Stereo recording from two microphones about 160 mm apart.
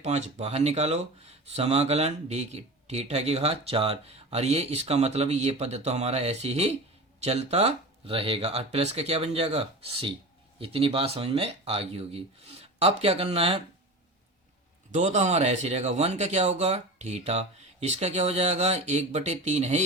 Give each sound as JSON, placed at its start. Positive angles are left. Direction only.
{"t": 0.0, "sound": "speech", "side_deg": -40}
{"t": 14.9, "sound": "speech", "side_deg": -45}